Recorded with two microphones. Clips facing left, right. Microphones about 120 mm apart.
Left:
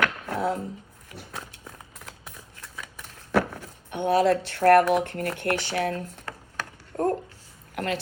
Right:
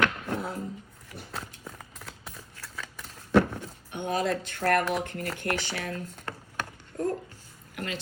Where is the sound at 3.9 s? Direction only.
55° left (ahead or behind).